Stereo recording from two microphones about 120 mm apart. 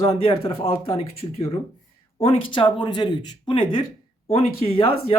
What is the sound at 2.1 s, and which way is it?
Speech, 55° left (ahead or behind).